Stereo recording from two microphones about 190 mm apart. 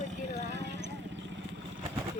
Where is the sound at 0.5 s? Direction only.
65° right (ahead or behind).